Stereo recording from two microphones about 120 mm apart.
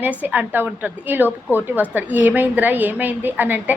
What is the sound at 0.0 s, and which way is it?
A woman's voice, 15° right (ahead or behind).